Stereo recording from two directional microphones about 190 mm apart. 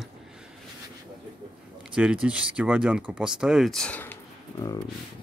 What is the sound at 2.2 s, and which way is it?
Speech, 5° right (ahead or behind).